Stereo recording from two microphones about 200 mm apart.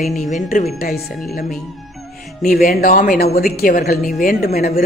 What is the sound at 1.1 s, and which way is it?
Speech, centre (ahead or behind).